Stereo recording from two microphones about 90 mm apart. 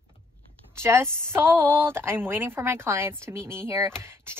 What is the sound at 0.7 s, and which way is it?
A woman's voice, 30° right (ahead or behind).